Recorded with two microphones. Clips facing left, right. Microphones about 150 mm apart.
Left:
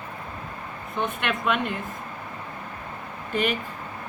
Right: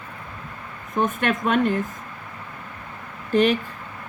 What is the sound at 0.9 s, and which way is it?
Speech, 45° right (ahead or behind).